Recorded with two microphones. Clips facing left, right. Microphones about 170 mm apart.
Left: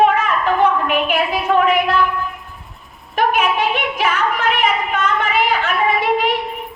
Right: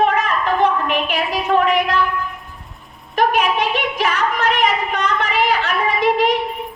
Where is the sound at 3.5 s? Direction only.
40° right (ahead or behind).